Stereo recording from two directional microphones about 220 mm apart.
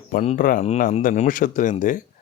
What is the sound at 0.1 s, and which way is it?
Speech, 35° left (ahead or behind).